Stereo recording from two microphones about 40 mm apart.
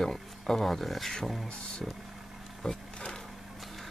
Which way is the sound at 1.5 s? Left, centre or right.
Left.